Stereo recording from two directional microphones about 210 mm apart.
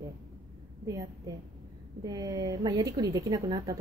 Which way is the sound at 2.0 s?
20° right (ahead or behind).